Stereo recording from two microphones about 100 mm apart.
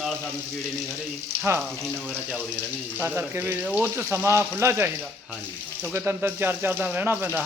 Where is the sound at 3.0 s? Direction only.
25° right (ahead or behind).